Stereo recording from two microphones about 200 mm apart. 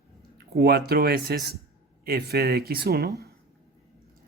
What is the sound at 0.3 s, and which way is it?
Speech, 50° right (ahead or behind).